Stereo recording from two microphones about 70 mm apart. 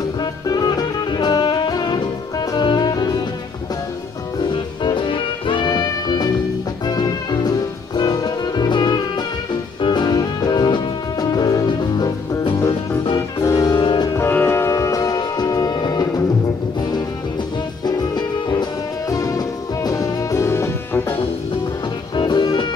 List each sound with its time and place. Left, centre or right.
0.2 s music: left
4.4 s music: left
6.9 s music: left
13.4 s music: left
14.3 s music: left
14.7 s music: left
15.1 s music: left
17.8 s music: left
22.1 s music: left